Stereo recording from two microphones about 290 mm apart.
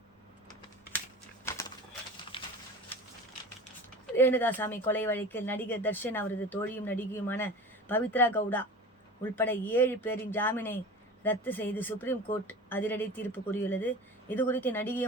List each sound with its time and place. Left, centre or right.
1.5 s pigeon: centre
2.3 s a sound: centre
4.1 s speech: centre